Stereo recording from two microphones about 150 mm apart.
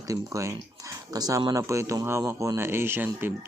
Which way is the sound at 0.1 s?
20° right (ahead or behind).